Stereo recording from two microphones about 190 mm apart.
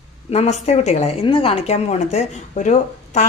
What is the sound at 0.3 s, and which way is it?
A woman's voice, 35° left (ahead or behind).